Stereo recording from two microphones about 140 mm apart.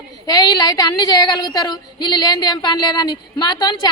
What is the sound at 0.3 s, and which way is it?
A woman's voice, 30° left (ahead or behind).